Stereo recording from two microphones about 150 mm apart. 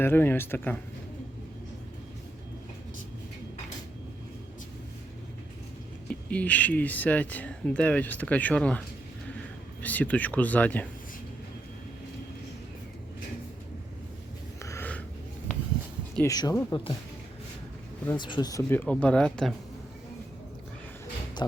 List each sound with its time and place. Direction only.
0.0 s speech: 15° left (ahead or behind)
6.1 s speech: 10° left (ahead or behind)
9.8 s speech: 10° left (ahead or behind)
14.6 s a sound: 15° left (ahead or behind)
16.2 s speech: 25° left (ahead or behind)
18.2 s speech: 30° left (ahead or behind)
18.7 s speech: 10° left (ahead or behind)